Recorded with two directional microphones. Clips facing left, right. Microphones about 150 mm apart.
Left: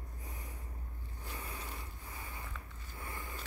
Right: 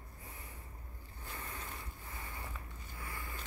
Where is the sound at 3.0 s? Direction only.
25° left (ahead or behind).